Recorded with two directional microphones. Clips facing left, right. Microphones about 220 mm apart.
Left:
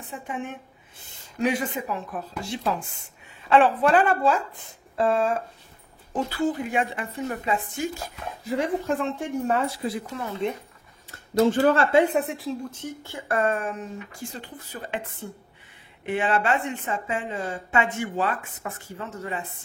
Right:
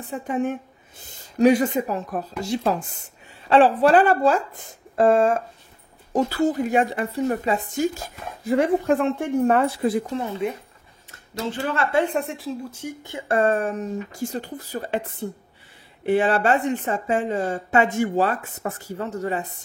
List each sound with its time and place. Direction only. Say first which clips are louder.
0.1 s speech: right 9 dB; 40° right (ahead or behind)
8.5 s a woman's voice: right 6 dB; 55° right (ahead or behind)
10.4 s speech: left 1 dB; 5° right (ahead or behind)
11.3 s speech: left 8 dB; 45° left (ahead or behind)
11.9 s speech: left 2 dB; 10° left (ahead or behind); by 19.4 s 40° right (ahead or behind)